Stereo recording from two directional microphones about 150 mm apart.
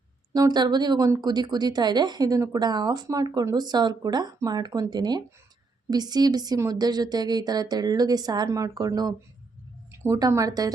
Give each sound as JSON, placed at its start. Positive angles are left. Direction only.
{"t": 0.3, "sound": "speech", "side_deg": -25}